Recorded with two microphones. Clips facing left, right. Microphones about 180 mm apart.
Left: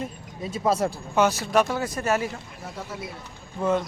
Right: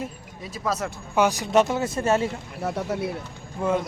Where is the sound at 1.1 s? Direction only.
15° right (ahead or behind).